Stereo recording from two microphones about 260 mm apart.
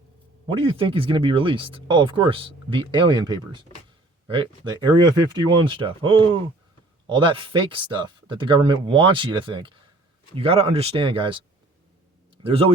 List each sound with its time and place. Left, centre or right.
0.4 s speech: centre